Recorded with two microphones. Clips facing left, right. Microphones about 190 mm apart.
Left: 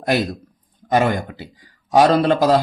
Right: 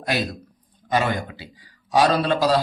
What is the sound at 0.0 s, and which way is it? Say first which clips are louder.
Speech: left 5 dB; 50° left (ahead or behind).